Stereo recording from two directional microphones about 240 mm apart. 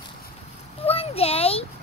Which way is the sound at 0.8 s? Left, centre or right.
Left.